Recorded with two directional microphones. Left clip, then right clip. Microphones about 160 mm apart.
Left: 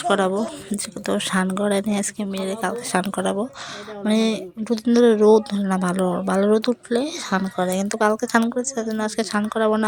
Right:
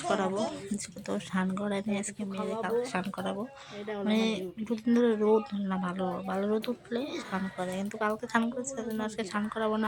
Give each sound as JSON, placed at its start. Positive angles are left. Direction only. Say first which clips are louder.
{"t": 0.1, "sound": "a woman's voice", "louder": "left 9 dB", "side_deg": 40}